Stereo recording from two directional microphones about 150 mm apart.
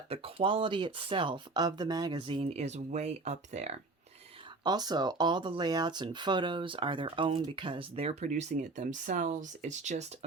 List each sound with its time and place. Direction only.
0.1 s speech: 40° right (ahead or behind)
4.6 s speech: 25° right (ahead or behind); by 10.1 s 50° right (ahead or behind)